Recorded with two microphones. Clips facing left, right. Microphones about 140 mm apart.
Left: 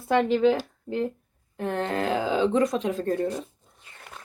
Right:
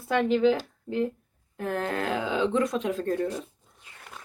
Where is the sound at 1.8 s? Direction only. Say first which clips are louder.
Left 4 dB; 30° left (ahead or behind).